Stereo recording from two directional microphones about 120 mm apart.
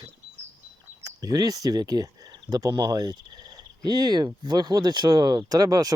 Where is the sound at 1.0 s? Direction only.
30° right (ahead or behind).